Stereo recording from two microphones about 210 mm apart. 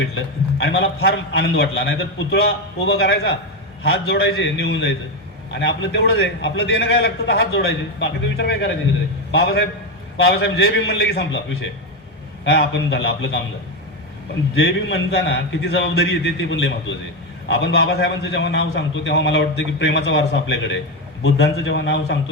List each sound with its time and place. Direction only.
1.0 s a man's voice: 55° left (ahead or behind)
14.5 s a man's voice: 55° left (ahead or behind)